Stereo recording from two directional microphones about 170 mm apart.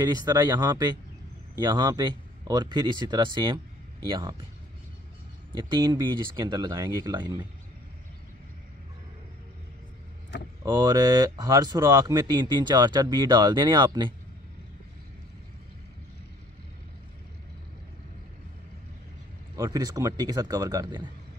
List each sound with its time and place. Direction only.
0.0 s speech: 25° right (ahead or behind)
5.6 s speech: 25° right (ahead or behind)
10.6 s speech: 25° right (ahead or behind)
19.5 s speech: 20° right (ahead or behind)